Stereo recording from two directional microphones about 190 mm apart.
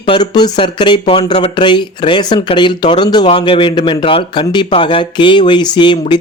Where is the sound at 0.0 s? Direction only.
25° left (ahead or behind).